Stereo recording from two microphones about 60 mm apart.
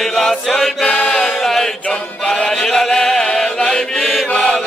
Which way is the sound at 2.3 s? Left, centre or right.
Centre.